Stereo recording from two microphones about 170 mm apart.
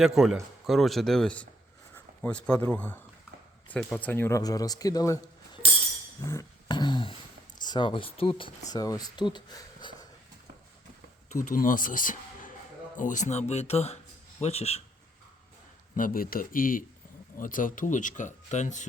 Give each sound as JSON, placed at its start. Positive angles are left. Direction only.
{"t": 0.0, "sound": "speech", "side_deg": -5}
{"t": 6.2, "sound": "beatboxing", "side_deg": 20}
{"t": 7.6, "sound": "speech", "side_deg": 25}
{"t": 11.3, "sound": "speech", "side_deg": 50}
{"t": 16.0, "sound": "speech", "side_deg": 55}